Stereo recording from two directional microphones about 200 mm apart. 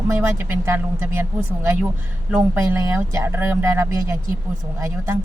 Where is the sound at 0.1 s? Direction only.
15° right (ahead or behind).